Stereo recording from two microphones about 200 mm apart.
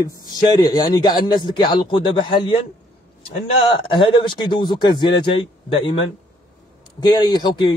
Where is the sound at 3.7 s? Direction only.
25° left (ahead or behind).